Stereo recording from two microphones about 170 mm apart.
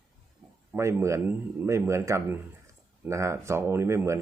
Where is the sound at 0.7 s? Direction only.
15° right (ahead or behind).